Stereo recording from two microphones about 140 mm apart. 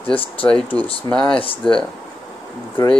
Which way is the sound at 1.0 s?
10° left (ahead or behind).